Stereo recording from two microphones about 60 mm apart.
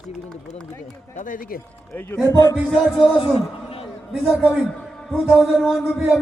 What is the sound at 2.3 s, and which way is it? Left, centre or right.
Music, left.